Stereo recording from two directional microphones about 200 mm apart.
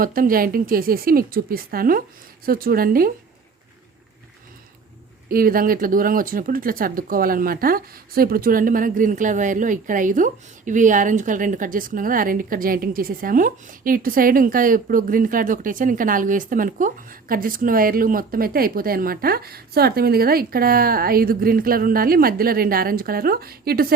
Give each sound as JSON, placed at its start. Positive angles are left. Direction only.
{"t": 0.0, "sound": "speech", "side_deg": -45}
{"t": 5.3, "sound": "speech", "side_deg": -45}